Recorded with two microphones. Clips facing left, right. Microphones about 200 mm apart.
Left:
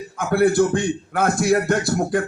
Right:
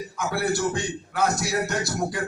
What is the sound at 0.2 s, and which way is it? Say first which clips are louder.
A man's voice: left 9 dB; 55° left (ahead or behind).